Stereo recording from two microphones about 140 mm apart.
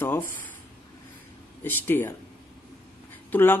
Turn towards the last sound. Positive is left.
turn(degrees=15)  # may be behind; listen again after turning